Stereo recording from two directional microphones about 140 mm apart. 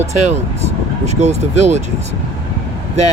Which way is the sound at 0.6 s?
50° right (ahead or behind).